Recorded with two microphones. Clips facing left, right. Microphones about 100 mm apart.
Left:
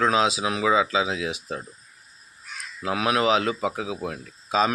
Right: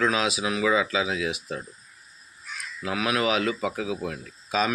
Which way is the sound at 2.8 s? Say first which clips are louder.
Left 3 dB; 30° left (ahead or behind).